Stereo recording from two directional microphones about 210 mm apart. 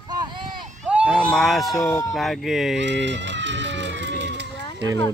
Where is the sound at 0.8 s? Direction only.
5° right (ahead or behind).